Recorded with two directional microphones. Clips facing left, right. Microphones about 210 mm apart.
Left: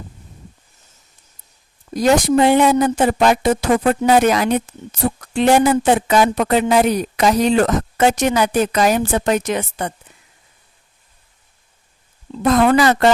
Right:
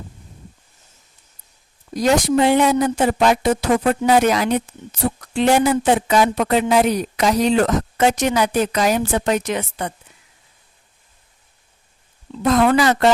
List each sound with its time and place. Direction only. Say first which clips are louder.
2.0 s speech: left 2 dB; 50° left (ahead or behind)
12.4 s speech: left 2 dB; 50° left (ahead or behind)